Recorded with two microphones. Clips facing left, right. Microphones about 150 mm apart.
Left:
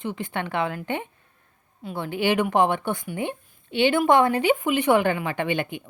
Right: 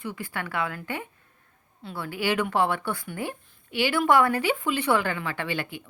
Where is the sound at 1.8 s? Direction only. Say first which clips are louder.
Left 4 dB; 20° left (ahead or behind).